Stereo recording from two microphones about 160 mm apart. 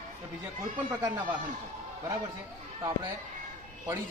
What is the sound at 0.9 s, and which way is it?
Speech, 20° right (ahead or behind).